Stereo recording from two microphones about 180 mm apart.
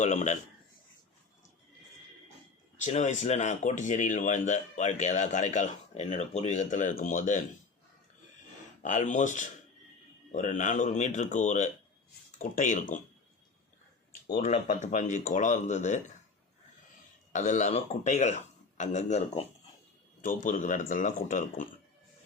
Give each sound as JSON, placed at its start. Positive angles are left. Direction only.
{"t": 0.0, "sound": "speech", "side_deg": 40}
{"t": 2.8, "sound": "speech", "side_deg": 40}
{"t": 8.8, "sound": "speech", "side_deg": 45}
{"t": 14.4, "sound": "speech", "side_deg": 40}
{"t": 17.3, "sound": "speech", "side_deg": 40}